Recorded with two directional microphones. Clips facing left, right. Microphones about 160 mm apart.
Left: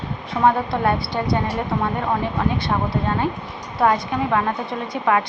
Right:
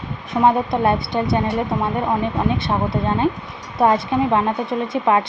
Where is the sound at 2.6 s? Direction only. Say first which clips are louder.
Right 2 dB; 20° right (ahead or behind).